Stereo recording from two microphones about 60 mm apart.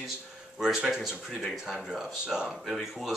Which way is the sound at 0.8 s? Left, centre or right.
Centre.